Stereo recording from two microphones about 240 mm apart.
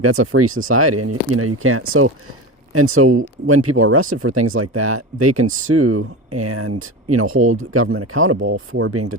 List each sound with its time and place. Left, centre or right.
0.0 s speech: right